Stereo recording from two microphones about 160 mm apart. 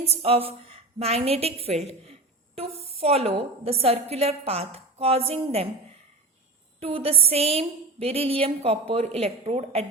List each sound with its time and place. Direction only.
0.0 s a woman's voice: 40° right (ahead or behind)
6.7 s a woman's voice: 35° right (ahead or behind)